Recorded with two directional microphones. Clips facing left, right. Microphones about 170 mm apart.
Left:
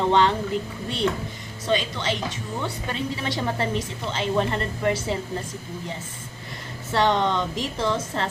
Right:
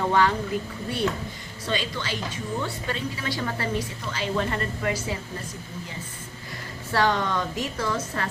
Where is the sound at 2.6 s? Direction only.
20° left (ahead or behind).